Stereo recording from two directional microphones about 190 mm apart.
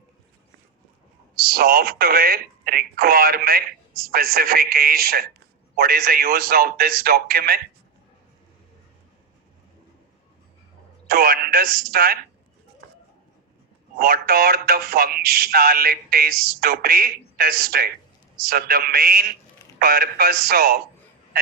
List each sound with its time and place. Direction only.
1.4 s speech: 50° right (ahead or behind)
11.1 s speech: 50° right (ahead or behind)
14.0 s speech: 50° right (ahead or behind)